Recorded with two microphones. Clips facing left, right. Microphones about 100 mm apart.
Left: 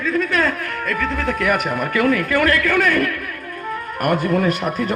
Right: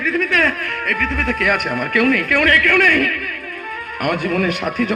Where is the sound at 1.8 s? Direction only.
75° right (ahead or behind).